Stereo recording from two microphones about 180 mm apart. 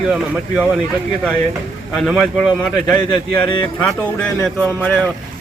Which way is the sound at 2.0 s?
5° left (ahead or behind).